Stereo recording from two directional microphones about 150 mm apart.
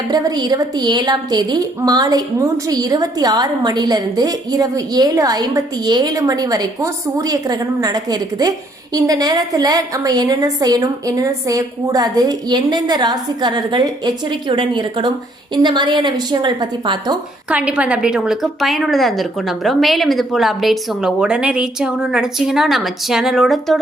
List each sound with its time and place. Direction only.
0.1 s a woman's voice: 25° right (ahead or behind)
17.5 s a woman's voice: 10° right (ahead or behind)